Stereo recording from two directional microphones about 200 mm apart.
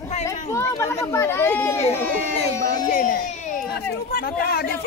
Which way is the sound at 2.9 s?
45° left (ahead or behind).